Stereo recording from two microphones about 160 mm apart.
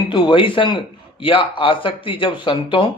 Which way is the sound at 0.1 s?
30° left (ahead or behind).